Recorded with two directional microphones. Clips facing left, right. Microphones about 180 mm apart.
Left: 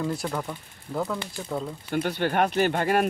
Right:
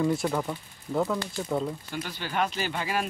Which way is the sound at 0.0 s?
Centre (ahead or behind).